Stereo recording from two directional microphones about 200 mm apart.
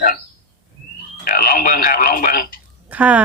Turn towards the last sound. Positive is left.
turn(degrees=-10)  # may be behind; listen again after turning